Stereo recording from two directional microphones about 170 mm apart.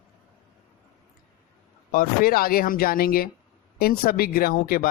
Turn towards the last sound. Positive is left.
turn(degrees=60)  # may be behind; listen again after turning